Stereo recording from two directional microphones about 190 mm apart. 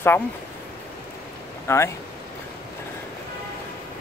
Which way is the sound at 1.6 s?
15° left (ahead or behind).